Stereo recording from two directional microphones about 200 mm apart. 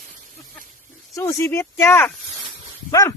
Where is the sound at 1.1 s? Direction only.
15° left (ahead or behind).